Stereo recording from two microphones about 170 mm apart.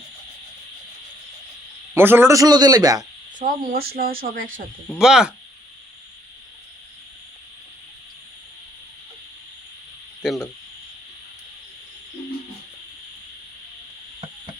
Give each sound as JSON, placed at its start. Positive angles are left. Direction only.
{"t": 1.9, "sound": "a man's voice", "side_deg": -10}
{"t": 3.3, "sound": "speech", "side_deg": -55}
{"t": 4.9, "sound": "speech", "side_deg": -5}
{"t": 10.2, "sound": "speech", "side_deg": 0}